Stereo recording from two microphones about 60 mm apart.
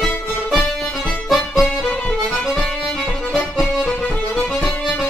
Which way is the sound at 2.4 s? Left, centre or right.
Centre.